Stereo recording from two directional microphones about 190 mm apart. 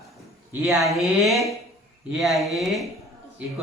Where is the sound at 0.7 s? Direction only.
15° right (ahead or behind).